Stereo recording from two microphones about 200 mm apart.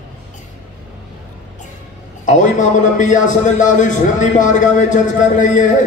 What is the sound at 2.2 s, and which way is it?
A man's voice, 40° left (ahead or behind).